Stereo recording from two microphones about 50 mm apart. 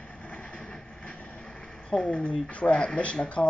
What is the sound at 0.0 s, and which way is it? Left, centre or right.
Vehicle, left.